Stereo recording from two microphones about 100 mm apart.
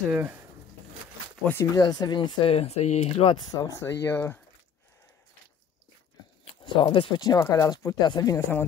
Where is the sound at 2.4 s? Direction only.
85° left.